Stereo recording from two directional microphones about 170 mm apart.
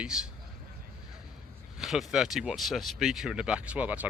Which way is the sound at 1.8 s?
Centre (ahead or behind).